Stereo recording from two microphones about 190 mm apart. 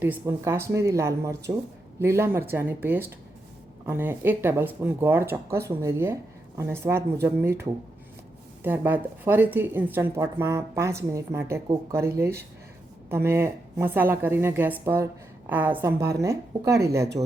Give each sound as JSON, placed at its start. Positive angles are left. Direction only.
{"t": 0.0, "sound": "speech", "side_deg": -10}